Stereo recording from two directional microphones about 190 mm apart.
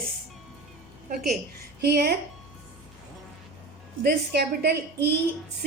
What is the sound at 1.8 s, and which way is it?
Speech, 55° right (ahead or behind).